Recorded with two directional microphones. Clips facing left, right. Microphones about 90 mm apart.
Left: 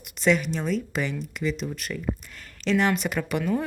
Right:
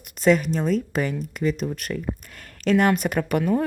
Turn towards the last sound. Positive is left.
turn(degrees=-45)  # may be behind; listen again after turning